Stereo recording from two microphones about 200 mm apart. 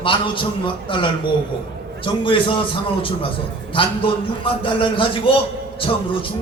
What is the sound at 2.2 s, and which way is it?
Speech, 25° left (ahead or behind).